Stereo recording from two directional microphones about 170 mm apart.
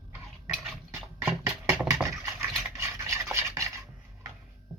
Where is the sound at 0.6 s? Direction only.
Centre (ahead or behind).